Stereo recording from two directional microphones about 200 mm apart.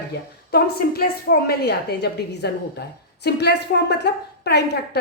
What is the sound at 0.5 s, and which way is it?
A woman's voice, 50° left (ahead or behind).